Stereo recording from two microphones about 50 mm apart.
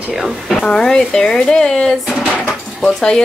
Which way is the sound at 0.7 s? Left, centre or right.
Centre.